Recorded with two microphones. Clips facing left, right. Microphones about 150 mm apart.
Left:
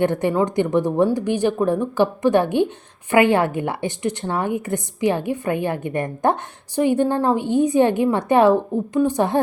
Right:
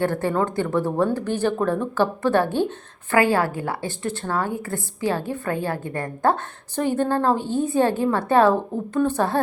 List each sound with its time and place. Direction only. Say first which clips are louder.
0.0 s speech: left 3 dB; 20° left (ahead or behind)